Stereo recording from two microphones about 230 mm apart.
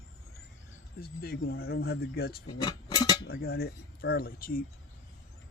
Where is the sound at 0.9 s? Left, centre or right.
Left.